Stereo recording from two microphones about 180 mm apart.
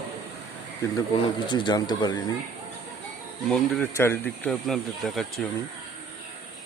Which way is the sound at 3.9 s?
15° left (ahead or behind).